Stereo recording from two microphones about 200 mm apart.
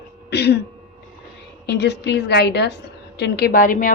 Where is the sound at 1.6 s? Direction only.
55° left (ahead or behind).